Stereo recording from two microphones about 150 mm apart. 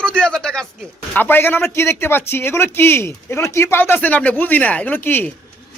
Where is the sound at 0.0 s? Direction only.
5° left (ahead or behind).